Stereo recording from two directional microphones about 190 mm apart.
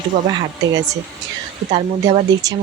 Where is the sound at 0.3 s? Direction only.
20° right (ahead or behind).